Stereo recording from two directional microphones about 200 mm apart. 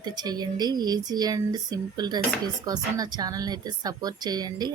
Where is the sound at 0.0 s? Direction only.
20° right (ahead or behind).